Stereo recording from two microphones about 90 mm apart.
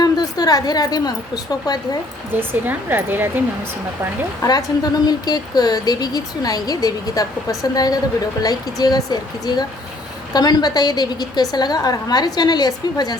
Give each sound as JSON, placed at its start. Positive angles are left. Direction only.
{"t": 0.0, "sound": "a woman's voice", "side_deg": 45}
{"t": 2.3, "sound": "speech", "side_deg": -25}
{"t": 4.4, "sound": "a woman's voice", "side_deg": 45}